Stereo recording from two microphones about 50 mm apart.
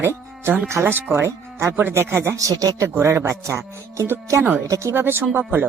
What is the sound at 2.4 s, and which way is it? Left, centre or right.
A man's voice, right.